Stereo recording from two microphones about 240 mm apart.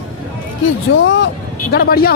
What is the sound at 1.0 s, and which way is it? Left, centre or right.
Speech, left.